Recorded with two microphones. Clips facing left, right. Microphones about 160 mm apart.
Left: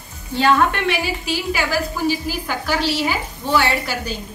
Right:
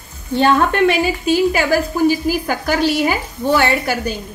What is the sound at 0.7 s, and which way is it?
A woman's voice, 45° right (ahead or behind).